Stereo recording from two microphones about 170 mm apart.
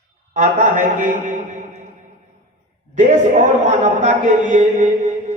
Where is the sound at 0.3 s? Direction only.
50° right (ahead or behind).